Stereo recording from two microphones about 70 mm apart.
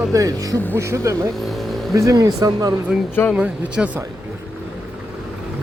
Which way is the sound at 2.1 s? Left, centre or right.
Right.